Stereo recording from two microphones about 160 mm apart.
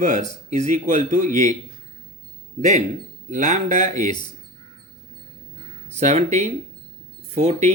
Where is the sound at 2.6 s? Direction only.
50° right (ahead or behind).